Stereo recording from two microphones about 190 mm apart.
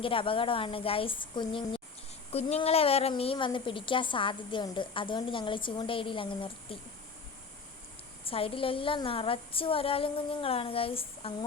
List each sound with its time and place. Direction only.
0.0 s a woman's voice: 30° left (ahead or behind)
8.2 s a woman's voice: 30° left (ahead or behind)